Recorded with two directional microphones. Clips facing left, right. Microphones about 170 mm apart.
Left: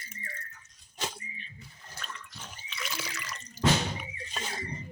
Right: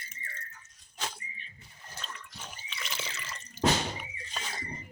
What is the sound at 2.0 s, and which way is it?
Pig, 25° right (ahead or behind).